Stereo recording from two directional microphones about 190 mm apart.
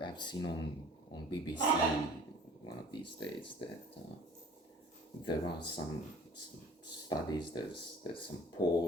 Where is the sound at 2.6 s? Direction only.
25° left (ahead or behind).